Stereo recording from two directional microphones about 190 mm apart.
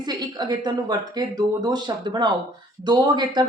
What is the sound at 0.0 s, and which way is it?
A woman's voice, 20° right (ahead or behind).